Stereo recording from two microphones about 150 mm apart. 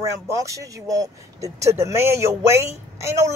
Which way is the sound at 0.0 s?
20° right (ahead or behind).